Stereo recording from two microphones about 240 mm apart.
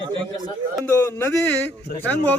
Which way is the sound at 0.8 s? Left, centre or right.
Centre.